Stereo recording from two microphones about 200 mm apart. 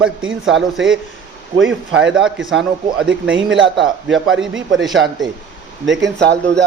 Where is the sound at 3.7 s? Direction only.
60° right (ahead or behind).